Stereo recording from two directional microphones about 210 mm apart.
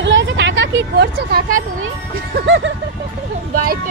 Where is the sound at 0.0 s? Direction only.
60° right (ahead or behind); by 1.6 s 45° right (ahead or behind).